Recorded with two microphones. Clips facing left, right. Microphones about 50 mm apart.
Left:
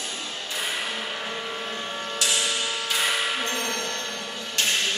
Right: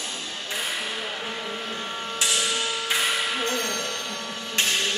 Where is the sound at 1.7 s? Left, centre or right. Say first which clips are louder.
Even; centre.